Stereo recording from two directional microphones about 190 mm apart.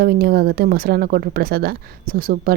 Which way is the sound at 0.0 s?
55° right (ahead or behind).